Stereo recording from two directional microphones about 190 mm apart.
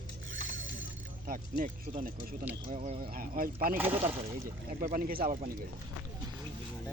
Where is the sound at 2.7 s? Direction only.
35° right (ahead or behind).